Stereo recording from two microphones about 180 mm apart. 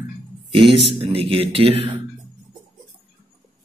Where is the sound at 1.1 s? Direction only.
30° right (ahead or behind).